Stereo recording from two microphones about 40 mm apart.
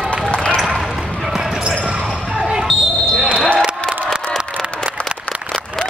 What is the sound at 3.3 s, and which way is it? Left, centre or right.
Basketball bounce, left.